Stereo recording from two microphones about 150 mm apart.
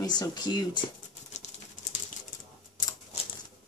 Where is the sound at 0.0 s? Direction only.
25° left (ahead or behind).